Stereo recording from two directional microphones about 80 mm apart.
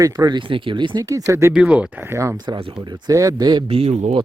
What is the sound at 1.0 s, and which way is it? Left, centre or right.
Speech, right.